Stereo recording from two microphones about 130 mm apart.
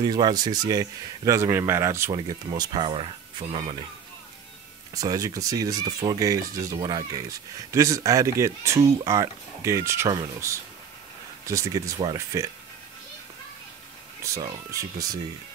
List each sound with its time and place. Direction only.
0.0 s speech: 35° right (ahead or behind)
4.9 s speech: 30° right (ahead or behind)
14.2 s speech: 25° right (ahead or behind)